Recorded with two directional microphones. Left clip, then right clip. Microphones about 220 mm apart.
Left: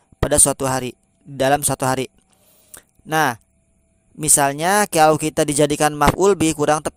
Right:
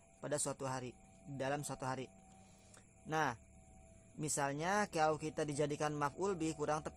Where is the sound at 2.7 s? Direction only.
40° left (ahead or behind).